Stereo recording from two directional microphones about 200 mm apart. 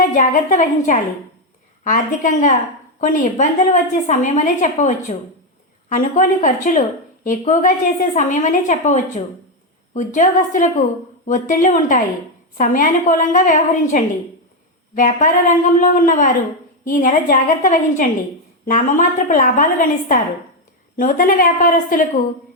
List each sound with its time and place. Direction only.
0.0 s a woman's voice: 40° left (ahead or behind)